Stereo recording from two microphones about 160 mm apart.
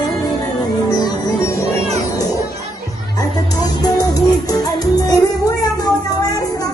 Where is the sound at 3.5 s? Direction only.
25° left (ahead or behind).